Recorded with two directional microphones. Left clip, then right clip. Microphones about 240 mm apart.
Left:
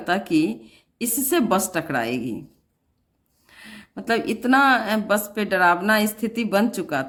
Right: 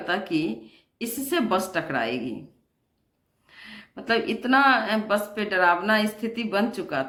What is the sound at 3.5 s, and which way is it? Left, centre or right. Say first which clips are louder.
Speech: left 2 dB; left.